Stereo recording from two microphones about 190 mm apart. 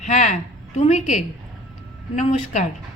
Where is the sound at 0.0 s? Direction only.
40° left (ahead or behind).